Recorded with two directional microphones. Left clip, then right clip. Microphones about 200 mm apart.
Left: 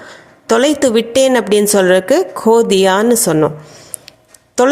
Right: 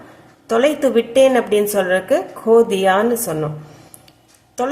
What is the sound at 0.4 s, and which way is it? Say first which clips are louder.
A woman's voice: left 4 dB; 45° left (ahead or behind).